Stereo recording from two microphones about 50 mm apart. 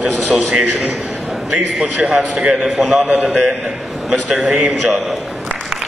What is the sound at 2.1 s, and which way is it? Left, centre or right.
Speech, centre.